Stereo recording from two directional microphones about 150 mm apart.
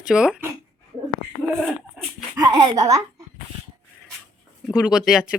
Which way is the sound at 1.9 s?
Centre (ahead or behind).